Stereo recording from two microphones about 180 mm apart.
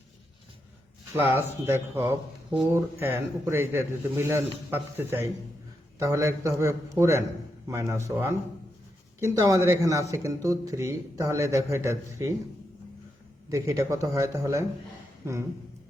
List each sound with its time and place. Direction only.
1.1 s speech: 15° right (ahead or behind)
13.5 s speech: 15° right (ahead or behind)